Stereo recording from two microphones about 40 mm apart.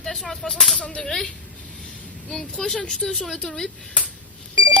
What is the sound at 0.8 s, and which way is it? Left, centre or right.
Speech, left.